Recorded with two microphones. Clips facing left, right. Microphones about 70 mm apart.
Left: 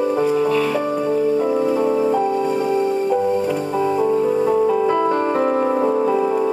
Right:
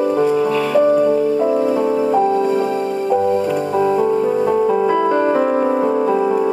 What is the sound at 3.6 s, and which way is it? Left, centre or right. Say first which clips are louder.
Music: right 3 dB; right.